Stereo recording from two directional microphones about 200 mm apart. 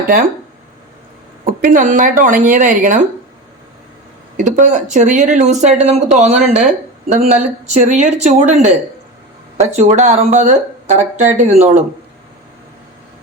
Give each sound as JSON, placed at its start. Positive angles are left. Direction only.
{"t": 0.0, "sound": "speech", "side_deg": -45}
{"t": 1.6, "sound": "speech", "side_deg": -45}
{"t": 4.4, "sound": "a woman's voice", "side_deg": -40}